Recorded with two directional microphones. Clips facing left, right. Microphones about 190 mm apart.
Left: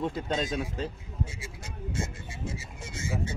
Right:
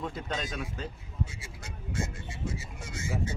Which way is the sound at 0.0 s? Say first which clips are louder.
Left 5 dB; 25° left (ahead or behind).